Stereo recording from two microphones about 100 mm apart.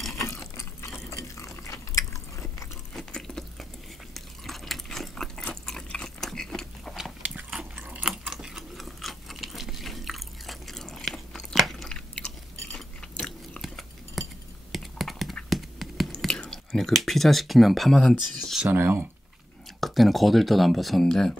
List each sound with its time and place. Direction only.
1.1 s biting: 30° left (ahead or behind)
2.9 s drip: 5° left (ahead or behind)
4.1 s a sound: centre (ahead or behind)
7.7 s a sound: 15° right (ahead or behind)
8.2 s a sound: 5° right (ahead or behind)
14.7 s computer keyboard: centre (ahead or behind)
16.3 s speech: 5° left (ahead or behind)
18.6 s speech: 20° right (ahead or behind)
19.8 s speech: centre (ahead or behind)